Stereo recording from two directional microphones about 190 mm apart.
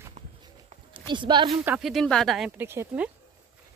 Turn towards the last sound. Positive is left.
turn(degrees=-10)  # may be behind; listen again after turning